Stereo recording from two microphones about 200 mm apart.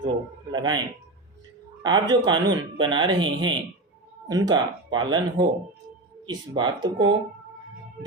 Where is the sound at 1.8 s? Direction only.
20° right (ahead or behind).